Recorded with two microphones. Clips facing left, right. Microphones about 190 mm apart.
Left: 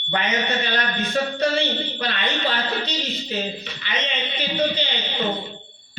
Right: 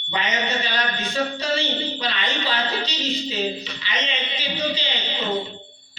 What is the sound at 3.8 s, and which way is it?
A man's voice, 55° left (ahead or behind).